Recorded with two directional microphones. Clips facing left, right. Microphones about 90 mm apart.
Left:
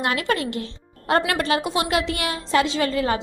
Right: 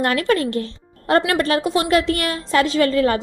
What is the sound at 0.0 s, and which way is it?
Speech, 45° right (ahead or behind).